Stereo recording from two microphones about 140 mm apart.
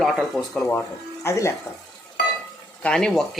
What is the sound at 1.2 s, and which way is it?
Speech, 20° left (ahead or behind).